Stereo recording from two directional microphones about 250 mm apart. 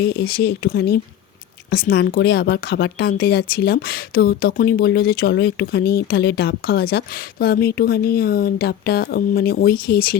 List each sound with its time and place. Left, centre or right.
0.0 s speech: left